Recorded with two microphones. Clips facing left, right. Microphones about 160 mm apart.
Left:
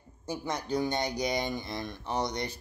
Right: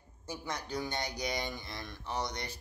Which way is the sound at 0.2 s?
20° left (ahead or behind).